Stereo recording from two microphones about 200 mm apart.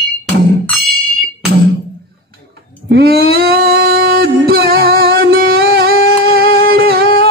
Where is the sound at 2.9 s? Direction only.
50° right (ahead or behind).